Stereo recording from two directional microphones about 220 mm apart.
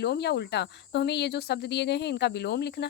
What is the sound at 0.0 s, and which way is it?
Cricket, 50° left (ahead or behind).